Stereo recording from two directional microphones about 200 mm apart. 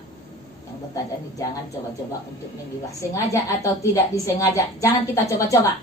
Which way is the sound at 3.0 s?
15° left (ahead or behind).